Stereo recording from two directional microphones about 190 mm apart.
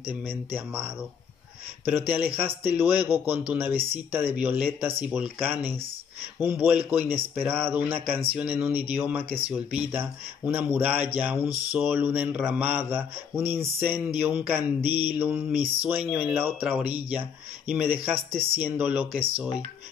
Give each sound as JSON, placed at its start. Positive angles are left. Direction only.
{"t": 0.0, "sound": "speech", "side_deg": -10}
{"t": 18.3, "sound": "speech", "side_deg": -30}
{"t": 18.6, "sound": "speech", "side_deg": -10}